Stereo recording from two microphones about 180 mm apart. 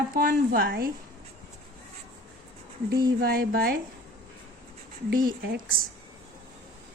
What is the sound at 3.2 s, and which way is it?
Speech, 60° right (ahead or behind).